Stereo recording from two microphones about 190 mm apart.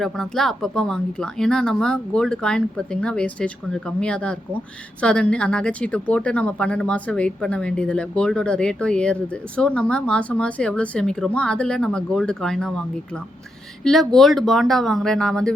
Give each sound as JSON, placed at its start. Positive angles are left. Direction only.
{"t": 0.0, "sound": "speech", "side_deg": 0}
{"t": 13.8, "sound": "speech", "side_deg": 0}